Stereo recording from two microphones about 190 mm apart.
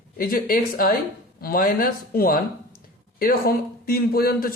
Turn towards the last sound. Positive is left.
turn(degrees=50)  # may be behind; listen again after turning